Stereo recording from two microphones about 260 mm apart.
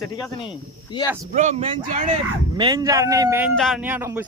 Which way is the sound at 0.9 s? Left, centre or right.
Centre.